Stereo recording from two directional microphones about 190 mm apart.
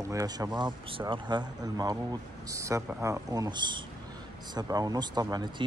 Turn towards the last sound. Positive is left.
turn(degrees=-20)  # may be behind; listen again after turning